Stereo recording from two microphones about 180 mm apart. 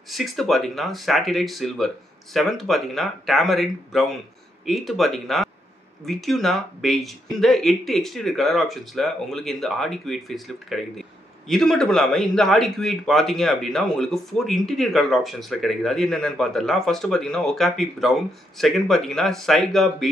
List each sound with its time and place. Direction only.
0.1 s speech: centre (ahead or behind)